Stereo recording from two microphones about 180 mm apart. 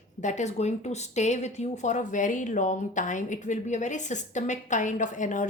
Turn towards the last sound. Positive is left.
turn(degrees=45)  # may be behind; listen again after turning